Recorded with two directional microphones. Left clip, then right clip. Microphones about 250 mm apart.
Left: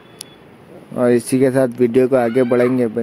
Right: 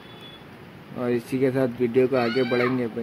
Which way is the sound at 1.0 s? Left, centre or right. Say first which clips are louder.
Left 10 dB; left.